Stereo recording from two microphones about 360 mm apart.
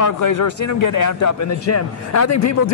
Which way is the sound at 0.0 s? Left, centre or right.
Left.